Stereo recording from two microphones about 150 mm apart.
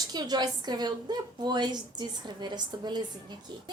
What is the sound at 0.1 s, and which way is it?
A woman's voice, 25° right (ahead or behind).